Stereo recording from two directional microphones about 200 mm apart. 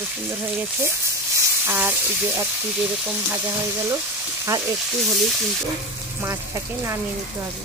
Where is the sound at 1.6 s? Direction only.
10° right (ahead or behind).